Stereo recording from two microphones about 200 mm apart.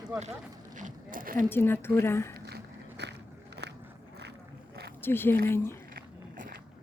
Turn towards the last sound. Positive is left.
turn(degrees=10)  # may be behind; listen again after turning